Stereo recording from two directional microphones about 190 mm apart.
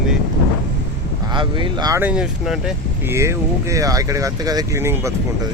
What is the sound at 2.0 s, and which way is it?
Speech, 5° right (ahead or behind).